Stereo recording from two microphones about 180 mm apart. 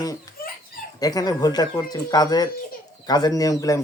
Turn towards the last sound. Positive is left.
turn(degrees=20)  # may be behind; listen again after turning